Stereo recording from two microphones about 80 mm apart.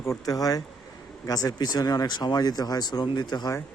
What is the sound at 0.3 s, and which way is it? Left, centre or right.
Speech, left.